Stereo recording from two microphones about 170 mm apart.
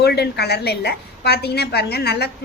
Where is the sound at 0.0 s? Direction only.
75° left (ahead or behind).